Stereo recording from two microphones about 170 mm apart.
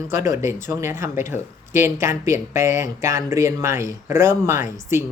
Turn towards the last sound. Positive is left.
turn(degrees=-15)  # may be behind; listen again after turning